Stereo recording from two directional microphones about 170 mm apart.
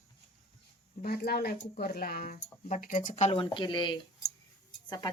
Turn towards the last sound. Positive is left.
turn(degrees=25)  # may be behind; listen again after turning